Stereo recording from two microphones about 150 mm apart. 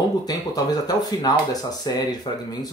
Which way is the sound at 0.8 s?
25° left (ahead or behind).